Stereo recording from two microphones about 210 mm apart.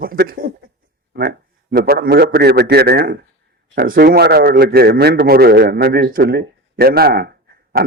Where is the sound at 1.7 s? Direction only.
45° right (ahead or behind).